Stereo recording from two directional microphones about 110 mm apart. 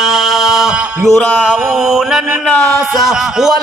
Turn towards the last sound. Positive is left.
turn(degrees=-5)  # may be behind; listen again after turning